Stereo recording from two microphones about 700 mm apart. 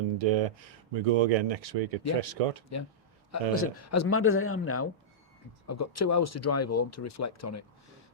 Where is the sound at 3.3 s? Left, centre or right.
Centre.